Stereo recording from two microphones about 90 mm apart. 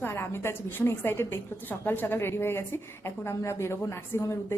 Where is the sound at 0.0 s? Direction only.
30° left (ahead or behind).